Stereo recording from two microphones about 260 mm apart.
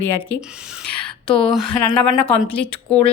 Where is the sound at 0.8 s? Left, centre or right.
Centre.